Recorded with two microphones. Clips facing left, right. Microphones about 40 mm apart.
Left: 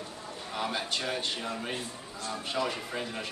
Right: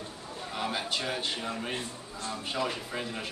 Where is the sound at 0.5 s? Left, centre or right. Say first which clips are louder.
Even; centre.